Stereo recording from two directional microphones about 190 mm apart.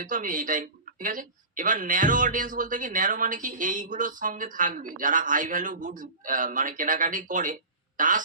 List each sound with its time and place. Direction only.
0.0 s speech: 45° right (ahead or behind)